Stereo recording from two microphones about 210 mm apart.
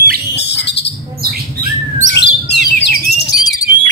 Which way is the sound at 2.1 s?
55° left (ahead or behind).